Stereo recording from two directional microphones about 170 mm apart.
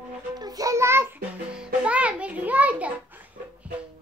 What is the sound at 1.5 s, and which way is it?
Music, 5° right (ahead or behind).